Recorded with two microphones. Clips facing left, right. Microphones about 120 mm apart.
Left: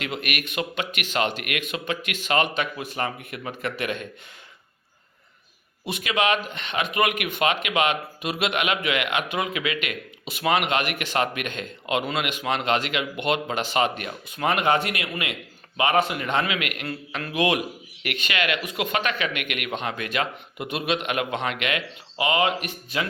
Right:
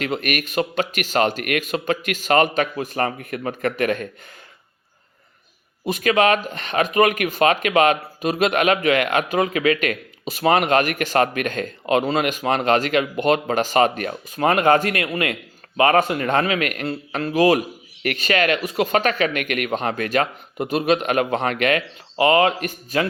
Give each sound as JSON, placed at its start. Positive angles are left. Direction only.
{"t": 0.0, "sound": "speech", "side_deg": -40}
{"t": 5.8, "sound": "speech", "side_deg": -45}